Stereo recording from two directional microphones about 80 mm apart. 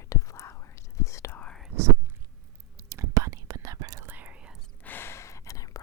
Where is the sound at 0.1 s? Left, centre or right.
Left.